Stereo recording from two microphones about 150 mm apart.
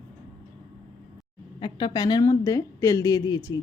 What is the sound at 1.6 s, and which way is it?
Speech, 30° left (ahead or behind).